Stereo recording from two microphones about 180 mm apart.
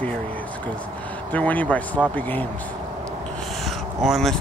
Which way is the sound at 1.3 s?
10° left (ahead or behind).